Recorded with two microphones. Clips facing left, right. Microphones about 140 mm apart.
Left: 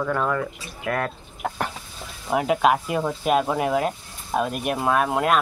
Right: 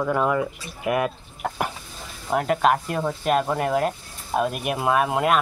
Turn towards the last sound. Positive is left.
turn(degrees=0)  # may be behind; listen again after turning